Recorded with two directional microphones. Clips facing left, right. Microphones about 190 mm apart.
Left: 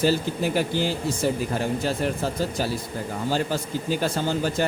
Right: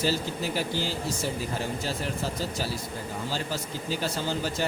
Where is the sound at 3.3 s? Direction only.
55° left (ahead or behind).